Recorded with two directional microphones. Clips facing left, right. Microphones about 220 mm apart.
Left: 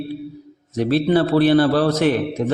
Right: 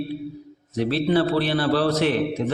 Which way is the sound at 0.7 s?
45° left (ahead or behind).